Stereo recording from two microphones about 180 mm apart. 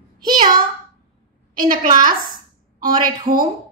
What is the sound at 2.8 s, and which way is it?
Speech, 50° right (ahead or behind).